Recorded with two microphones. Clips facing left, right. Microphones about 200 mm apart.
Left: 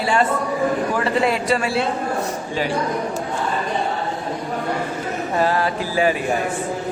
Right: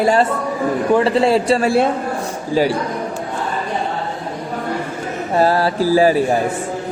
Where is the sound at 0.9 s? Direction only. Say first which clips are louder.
Right 6 dB; 30° right (ahead or behind).